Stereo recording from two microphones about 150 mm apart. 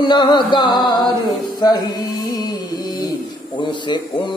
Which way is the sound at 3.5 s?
30° left (ahead or behind).